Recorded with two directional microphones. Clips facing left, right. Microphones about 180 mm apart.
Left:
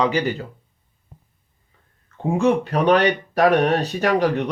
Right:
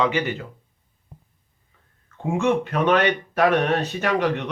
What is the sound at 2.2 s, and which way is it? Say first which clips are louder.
Speech: left 3 dB; 35° left (ahead or behind).